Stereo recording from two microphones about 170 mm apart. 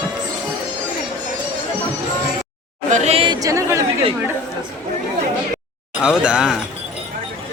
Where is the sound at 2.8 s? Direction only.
45° right (ahead or behind); by 3.8 s 20° right (ahead or behind).